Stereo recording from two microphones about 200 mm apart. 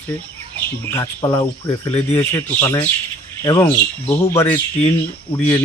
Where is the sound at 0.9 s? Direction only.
15° left (ahead or behind).